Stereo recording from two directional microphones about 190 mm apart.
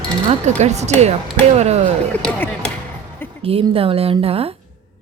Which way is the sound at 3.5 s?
30° right (ahead or behind).